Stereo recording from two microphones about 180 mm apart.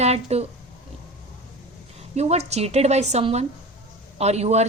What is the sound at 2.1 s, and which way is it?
A woman's voice, 35° right (ahead or behind).